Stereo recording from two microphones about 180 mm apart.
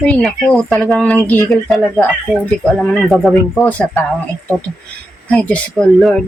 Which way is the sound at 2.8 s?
5° left (ahead or behind).